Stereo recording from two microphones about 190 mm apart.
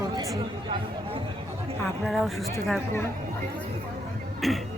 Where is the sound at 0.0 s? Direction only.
20° right (ahead or behind).